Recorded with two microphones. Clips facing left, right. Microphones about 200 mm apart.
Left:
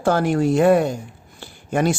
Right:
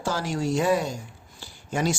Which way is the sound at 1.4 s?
60° left (ahead or behind).